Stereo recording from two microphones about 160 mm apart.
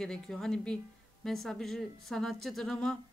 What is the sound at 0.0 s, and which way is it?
Speech, 5° left (ahead or behind).